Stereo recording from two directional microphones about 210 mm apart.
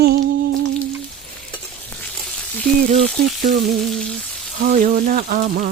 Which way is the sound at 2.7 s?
35° right (ahead or behind).